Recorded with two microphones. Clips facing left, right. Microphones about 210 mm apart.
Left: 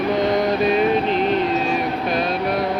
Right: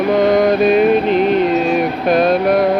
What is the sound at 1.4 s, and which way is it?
Music, 55° right (ahead or behind).